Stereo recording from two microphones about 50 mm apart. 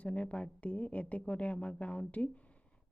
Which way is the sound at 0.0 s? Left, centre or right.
Left.